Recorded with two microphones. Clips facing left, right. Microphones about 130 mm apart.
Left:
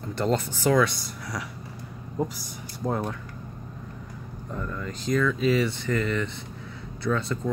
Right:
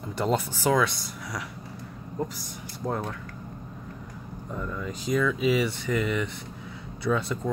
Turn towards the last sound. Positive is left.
turn(degrees=-10)  # may be behind; listen again after turning